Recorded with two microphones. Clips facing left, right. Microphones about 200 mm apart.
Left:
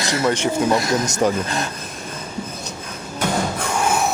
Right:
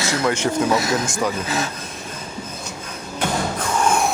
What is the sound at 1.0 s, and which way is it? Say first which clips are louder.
Speech: left 4 dB; 40° left (ahead or behind).